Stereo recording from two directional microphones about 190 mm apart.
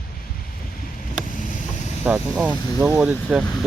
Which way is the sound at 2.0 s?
10° right (ahead or behind).